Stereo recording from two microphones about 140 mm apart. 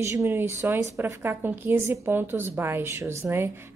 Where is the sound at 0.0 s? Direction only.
15° right (ahead or behind).